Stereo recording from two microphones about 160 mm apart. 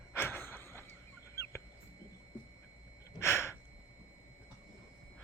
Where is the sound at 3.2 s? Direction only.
15° left (ahead or behind).